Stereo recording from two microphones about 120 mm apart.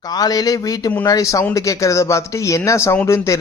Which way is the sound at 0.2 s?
30° left (ahead or behind).